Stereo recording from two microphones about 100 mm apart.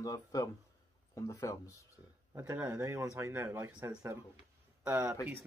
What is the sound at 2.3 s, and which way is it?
Speech, 25° right (ahead or behind).